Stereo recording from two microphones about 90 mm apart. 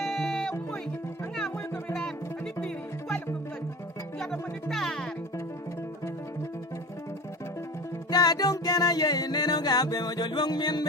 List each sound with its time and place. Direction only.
0.0 s music: 5° left (ahead or behind)
4.2 s music: 5° left (ahead or behind)
8.1 s music: 45° left (ahead or behind)